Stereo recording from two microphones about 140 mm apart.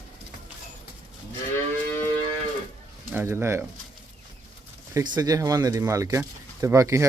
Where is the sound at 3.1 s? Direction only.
15° right (ahead or behind).